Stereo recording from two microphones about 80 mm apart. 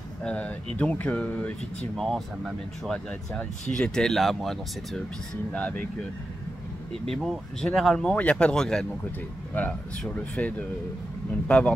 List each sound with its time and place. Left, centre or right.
0.2 s speech: centre
2.0 s speech: centre
3.1 s speech: centre
5.5 s speech: centre
7.6 s speech: centre
8.1 s speech: centre
9.0 s speech: centre